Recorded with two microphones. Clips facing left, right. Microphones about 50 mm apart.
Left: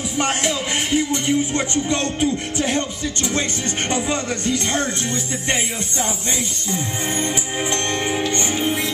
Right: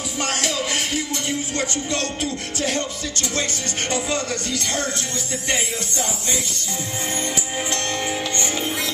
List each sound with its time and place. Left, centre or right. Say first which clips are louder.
0.2 s music: left 3 dB; left
7.7 s music: left 3 dB; left